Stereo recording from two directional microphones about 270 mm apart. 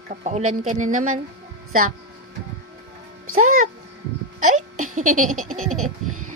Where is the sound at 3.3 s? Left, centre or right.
Right.